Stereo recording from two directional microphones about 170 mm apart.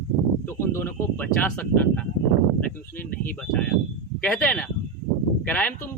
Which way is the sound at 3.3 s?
5° left (ahead or behind).